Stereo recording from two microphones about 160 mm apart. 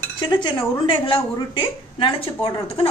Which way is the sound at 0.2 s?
30° left (ahead or behind).